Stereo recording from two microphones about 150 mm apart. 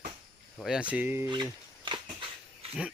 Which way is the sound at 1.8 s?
30° right (ahead or behind).